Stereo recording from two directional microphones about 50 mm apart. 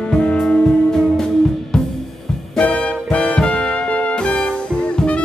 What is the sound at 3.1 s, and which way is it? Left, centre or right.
Music, centre.